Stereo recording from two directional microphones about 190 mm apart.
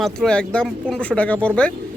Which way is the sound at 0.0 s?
Centre (ahead or behind).